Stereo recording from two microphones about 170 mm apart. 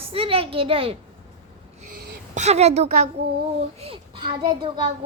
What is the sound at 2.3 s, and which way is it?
A woman's voice, 40° right (ahead or behind).